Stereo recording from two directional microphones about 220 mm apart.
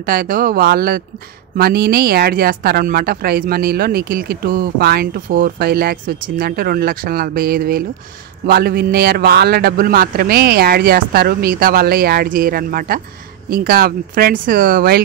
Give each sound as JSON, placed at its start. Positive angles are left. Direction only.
{"t": 0.0, "sound": "speech", "side_deg": -40}